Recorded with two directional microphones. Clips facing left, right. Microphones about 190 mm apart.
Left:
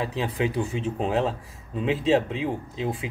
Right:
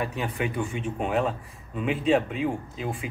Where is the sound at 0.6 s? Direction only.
30° left (ahead or behind).